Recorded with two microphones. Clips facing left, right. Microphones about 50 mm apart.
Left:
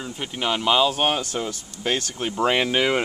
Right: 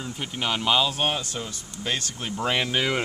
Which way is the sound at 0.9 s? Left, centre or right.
Left.